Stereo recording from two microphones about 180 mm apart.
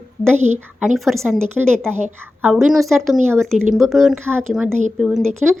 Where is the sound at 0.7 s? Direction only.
Centre (ahead or behind).